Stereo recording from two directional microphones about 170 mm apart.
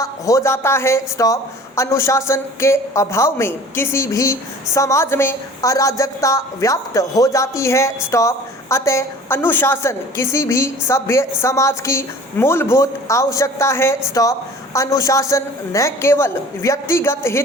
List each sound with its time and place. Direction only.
0.0 s a woman's voice: 20° left (ahead or behind)